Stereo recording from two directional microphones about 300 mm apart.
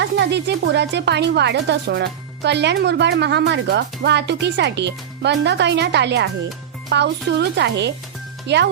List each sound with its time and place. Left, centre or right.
0.0 s speech: right